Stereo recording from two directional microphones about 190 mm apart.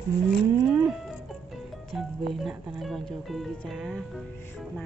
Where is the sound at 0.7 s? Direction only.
5° right (ahead or behind).